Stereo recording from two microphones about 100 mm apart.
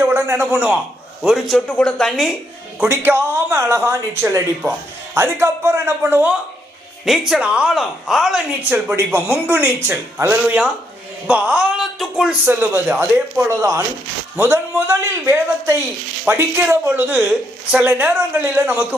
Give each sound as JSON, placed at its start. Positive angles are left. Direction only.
{"t": 0.0, "sound": "a man's voice", "side_deg": -25}
{"t": 1.2, "sound": "a woman's voice", "side_deg": -5}
{"t": 1.5, "sound": "a woman's voice", "side_deg": 10}
{"t": 2.8, "sound": "speech", "side_deg": -20}
{"t": 7.0, "sound": "a woman's voice", "side_deg": -5}
{"t": 8.7, "sound": "speech", "side_deg": -20}
{"t": 11.3, "sound": "speech", "side_deg": -10}
{"t": 12.5, "sound": "speech", "side_deg": -25}